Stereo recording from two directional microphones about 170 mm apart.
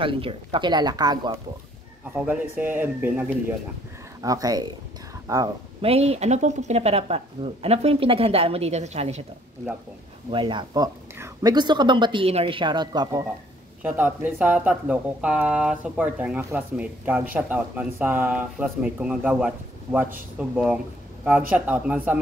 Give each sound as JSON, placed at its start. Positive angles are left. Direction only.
{"t": 0.0, "sound": "speech", "side_deg": -30}
{"t": 2.5, "sound": "speech", "side_deg": -10}
{"t": 4.2, "sound": "speech", "side_deg": -20}
{"t": 5.8, "sound": "speech", "side_deg": -35}
{"t": 10.3, "sound": "speech", "side_deg": -25}
{"t": 13.8, "sound": "speech", "side_deg": -10}